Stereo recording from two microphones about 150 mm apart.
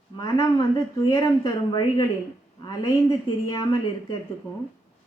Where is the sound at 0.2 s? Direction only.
25° left (ahead or behind).